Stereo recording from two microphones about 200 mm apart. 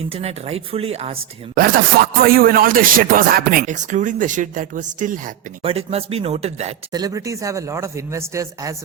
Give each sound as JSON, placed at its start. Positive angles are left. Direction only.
{"t": 0.1, "sound": "speech", "side_deg": -30}
{"t": 1.5, "sound": "speech", "side_deg": -45}
{"t": 5.6, "sound": "speech", "side_deg": -30}
{"t": 6.9, "sound": "speech", "side_deg": -15}